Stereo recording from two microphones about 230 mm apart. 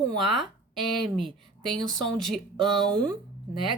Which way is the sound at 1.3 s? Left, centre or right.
Right.